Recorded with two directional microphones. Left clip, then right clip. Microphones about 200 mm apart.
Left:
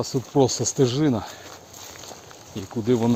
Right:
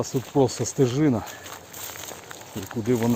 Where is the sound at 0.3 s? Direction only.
15° left (ahead or behind).